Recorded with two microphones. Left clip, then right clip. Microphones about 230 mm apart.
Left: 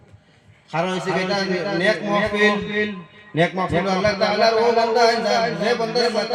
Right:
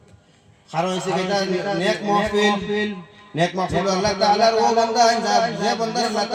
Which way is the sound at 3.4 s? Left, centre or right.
Left.